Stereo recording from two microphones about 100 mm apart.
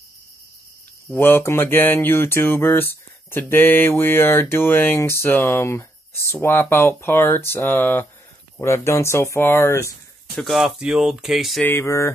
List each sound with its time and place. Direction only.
1.1 s speech: 25° left (ahead or behind)
10.3 s speech: centre (ahead or behind)
11.6 s speech: 25° left (ahead or behind)